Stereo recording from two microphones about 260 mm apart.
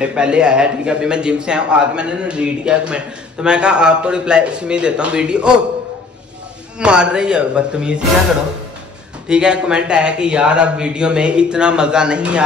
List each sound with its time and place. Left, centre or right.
0.0 s a man's voice: centre
6.8 s a man's voice: centre
9.3 s a man's voice: centre